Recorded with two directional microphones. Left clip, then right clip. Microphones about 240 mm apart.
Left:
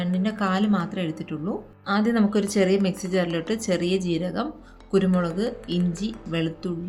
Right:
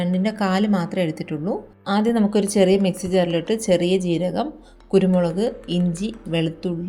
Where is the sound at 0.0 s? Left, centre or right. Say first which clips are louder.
Right 4 dB; centre.